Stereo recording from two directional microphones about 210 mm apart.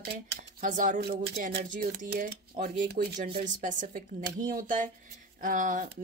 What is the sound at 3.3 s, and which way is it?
Speech, 35° right (ahead or behind).